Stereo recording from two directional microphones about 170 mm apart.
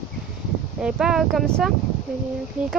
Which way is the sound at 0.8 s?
5° right (ahead or behind).